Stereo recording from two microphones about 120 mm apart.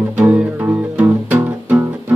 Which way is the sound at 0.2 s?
10° right (ahead or behind).